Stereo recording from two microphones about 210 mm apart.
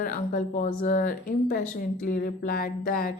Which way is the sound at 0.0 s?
40° left (ahead or behind).